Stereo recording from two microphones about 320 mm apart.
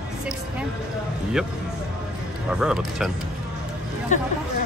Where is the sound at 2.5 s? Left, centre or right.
Centre.